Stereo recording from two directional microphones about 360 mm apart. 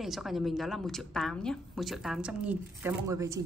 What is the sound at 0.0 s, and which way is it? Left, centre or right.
A woman's voice, centre.